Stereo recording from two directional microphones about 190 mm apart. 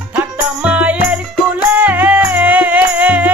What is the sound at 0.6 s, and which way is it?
Music, 5° right (ahead or behind).